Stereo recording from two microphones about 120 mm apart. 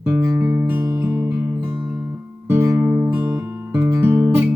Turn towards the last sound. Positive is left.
turn(degrees=-20)  # may be behind; listen again after turning